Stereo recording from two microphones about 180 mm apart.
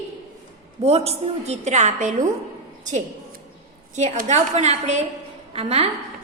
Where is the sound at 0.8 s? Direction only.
35° right (ahead or behind).